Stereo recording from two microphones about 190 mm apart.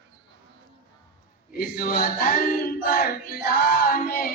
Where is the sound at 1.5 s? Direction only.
50° left (ahead or behind).